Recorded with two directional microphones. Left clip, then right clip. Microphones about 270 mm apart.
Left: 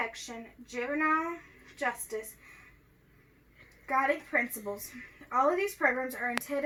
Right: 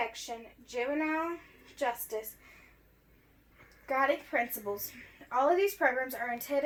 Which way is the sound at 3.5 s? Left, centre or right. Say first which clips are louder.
Left 1 dB; centre.